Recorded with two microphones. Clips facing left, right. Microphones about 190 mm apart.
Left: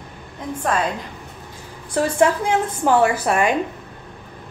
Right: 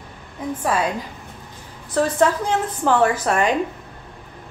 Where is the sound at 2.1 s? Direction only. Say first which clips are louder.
Left 4 dB; 15° left (ahead or behind).